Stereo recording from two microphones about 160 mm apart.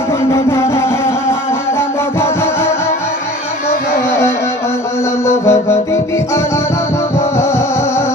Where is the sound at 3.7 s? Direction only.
90° left.